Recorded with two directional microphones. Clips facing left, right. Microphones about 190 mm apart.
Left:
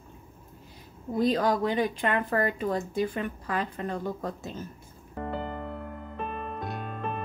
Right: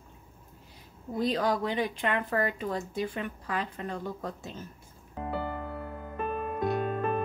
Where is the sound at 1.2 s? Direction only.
45° left (ahead or behind).